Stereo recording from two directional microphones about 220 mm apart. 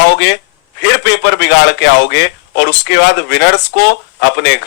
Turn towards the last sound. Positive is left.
turn(degrees=50)  # may be behind; listen again after turning